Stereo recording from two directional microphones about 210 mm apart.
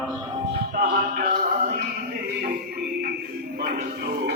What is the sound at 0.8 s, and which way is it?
Music, 40° right (ahead or behind).